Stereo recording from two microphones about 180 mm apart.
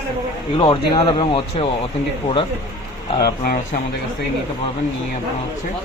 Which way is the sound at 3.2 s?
60° left (ahead or behind).